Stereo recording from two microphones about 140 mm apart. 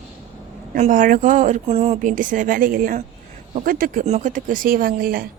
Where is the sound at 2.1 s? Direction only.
70° right (ahead or behind).